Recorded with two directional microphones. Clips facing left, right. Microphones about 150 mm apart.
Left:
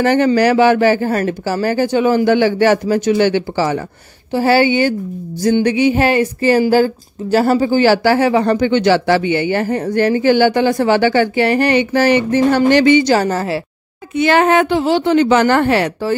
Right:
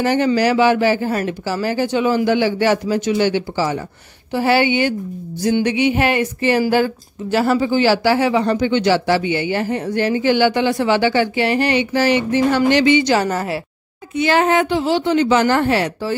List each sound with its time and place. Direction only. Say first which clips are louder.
0.0 s a woman's voice: left 4 dB; 55° left (ahead or behind)
4.3 s a sound: left 3 dB; 35° left (ahead or behind)
6.7 s a woman's voice: left 4 dB; 35° left (ahead or behind)
14.1 s a woman's voice: left 3 dB; 60° left (ahead or behind)